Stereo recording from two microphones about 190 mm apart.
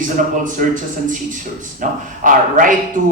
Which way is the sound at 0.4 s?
45° right (ahead or behind).